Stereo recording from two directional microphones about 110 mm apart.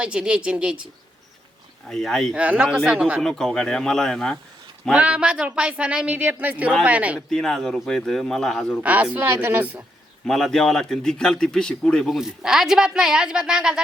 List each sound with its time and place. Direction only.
0.0 s speech: 10° right (ahead or behind)
1.9 s a man's voice: 5° left (ahead or behind)
2.3 s speech: 10° right (ahead or behind)
3.2 s a man's voice: 5° left (ahead or behind)
4.9 s speech: 10° right (ahead or behind)
7.3 s a man's voice: 5° left (ahead or behind)
8.8 s speech: 15° right (ahead or behind)
10.2 s a man's voice: 5° left (ahead or behind)